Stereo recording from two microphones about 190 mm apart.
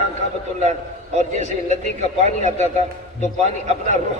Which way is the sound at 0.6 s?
40° right (ahead or behind).